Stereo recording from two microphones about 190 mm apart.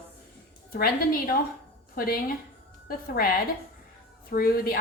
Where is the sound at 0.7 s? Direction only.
50° left (ahead or behind).